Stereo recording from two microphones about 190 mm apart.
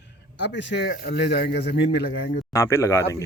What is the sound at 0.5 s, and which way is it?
Speech, 70° left (ahead or behind).